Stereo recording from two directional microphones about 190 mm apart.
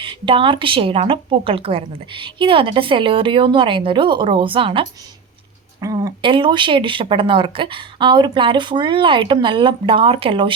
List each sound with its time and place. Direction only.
0.0 s speech: 25° right (ahead or behind)